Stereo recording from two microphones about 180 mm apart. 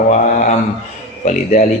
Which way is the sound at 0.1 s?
40° left (ahead or behind).